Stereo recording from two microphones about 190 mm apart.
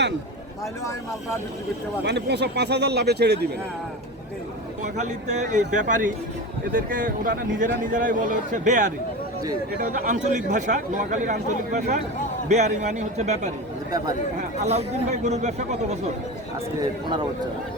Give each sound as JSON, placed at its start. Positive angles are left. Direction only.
{"t": 2.0, "sound": "speech", "side_deg": -65}
{"t": 4.8, "sound": "a man's voice", "side_deg": -40}
{"t": 14.6, "sound": "speech", "side_deg": -35}